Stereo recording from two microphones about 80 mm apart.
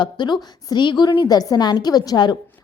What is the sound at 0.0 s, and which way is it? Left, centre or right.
A woman's voice, left.